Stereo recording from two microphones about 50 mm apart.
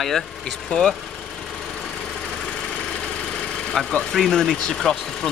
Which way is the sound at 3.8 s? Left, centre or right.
Centre.